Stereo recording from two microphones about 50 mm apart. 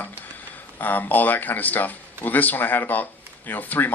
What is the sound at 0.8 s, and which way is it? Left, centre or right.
Speech, left.